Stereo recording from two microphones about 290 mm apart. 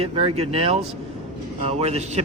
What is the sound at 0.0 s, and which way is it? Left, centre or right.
A man's voice, centre.